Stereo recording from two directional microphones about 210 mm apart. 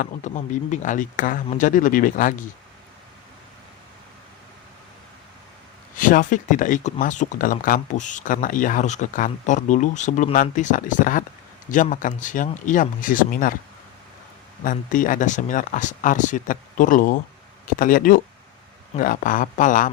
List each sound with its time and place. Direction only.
0.0 s speech: 35° left (ahead or behind)
6.0 s speech: 40° left (ahead or behind)
14.6 s speech: 40° left (ahead or behind)